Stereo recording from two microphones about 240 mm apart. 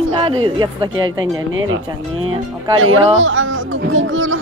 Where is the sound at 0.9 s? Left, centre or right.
Right.